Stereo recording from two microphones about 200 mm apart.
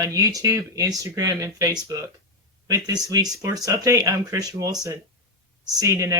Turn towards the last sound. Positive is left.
turn(degrees=-15)  # may be behind; listen again after turning